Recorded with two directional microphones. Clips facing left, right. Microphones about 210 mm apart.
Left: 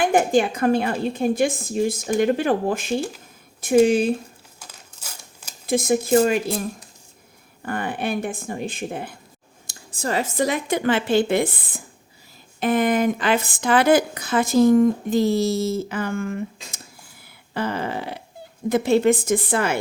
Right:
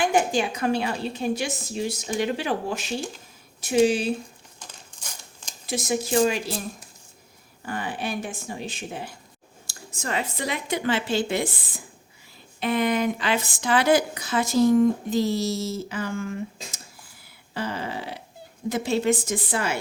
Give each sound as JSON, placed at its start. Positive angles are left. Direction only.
{"t": 0.0, "sound": "a woman's voice", "side_deg": 55}
{"t": 4.6, "sound": "a sound", "side_deg": 5}
{"t": 5.6, "sound": "a woman's voice", "side_deg": 55}
{"t": 7.6, "sound": "speech", "side_deg": 55}
{"t": 9.9, "sound": "a woman's voice", "side_deg": 35}